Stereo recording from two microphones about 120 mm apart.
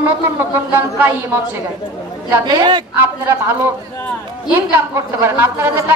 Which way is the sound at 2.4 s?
40° right (ahead or behind).